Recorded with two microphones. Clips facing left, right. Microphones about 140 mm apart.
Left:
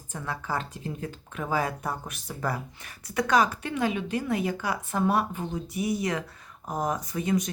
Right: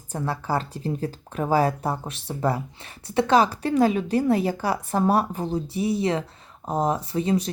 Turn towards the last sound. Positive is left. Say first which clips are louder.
# right 4 dB
turn(degrees=-30)  # may be behind; listen again after turning